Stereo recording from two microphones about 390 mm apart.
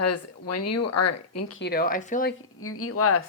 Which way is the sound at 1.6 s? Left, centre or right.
Left.